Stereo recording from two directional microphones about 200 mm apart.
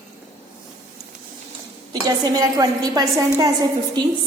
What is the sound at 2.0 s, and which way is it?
A woman's voice, 20° right (ahead or behind).